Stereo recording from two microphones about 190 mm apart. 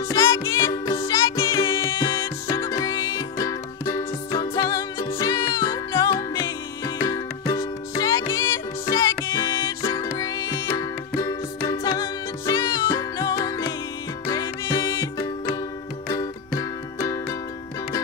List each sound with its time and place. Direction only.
0.1 s music: 20° left (ahead or behind)